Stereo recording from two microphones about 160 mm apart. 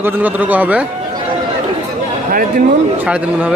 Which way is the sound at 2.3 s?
60° right (ahead or behind).